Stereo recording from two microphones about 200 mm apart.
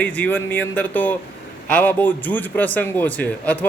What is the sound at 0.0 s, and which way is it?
A man's voice, 5° left (ahead or behind).